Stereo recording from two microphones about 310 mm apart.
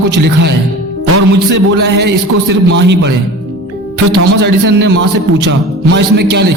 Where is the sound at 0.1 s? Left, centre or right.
Right.